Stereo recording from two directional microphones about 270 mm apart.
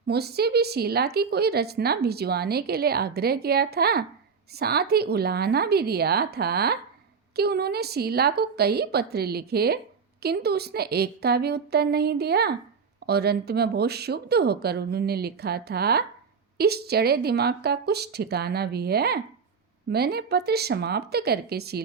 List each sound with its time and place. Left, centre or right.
0.1 s a woman's voice: right